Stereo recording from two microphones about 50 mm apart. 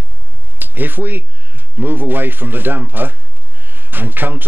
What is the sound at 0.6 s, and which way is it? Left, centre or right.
Speech, right.